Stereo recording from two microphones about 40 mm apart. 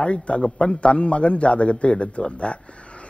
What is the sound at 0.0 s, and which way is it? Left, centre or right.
A man's voice, left.